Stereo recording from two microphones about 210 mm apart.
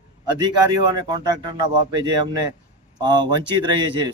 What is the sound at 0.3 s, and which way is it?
A man's voice, 20° right (ahead or behind).